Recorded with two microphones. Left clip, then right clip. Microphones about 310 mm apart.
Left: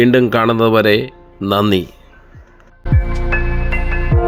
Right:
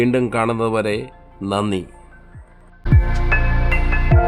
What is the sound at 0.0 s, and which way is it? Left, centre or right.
Speech, centre.